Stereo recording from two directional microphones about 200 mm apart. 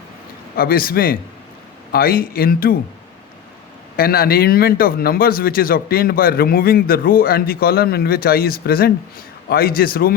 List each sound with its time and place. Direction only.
0.5 s speech: 50° left (ahead or behind)
3.9 s speech: 50° left (ahead or behind)